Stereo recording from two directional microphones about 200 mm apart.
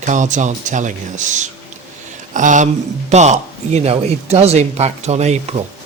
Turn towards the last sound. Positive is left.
turn(degrees=-35)  # may be behind; listen again after turning